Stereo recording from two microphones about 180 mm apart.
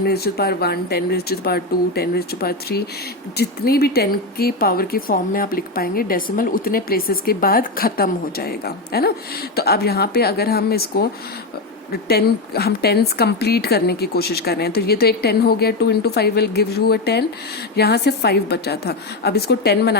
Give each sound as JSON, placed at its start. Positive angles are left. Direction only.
{"t": 0.0, "sound": "speech", "side_deg": 60}